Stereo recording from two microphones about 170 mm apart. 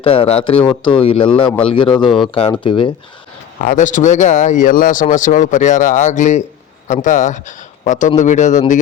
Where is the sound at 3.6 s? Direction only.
50° left (ahead or behind).